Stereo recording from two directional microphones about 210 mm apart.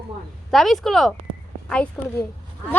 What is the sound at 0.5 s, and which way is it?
A woman's voice, centre (ahead or behind).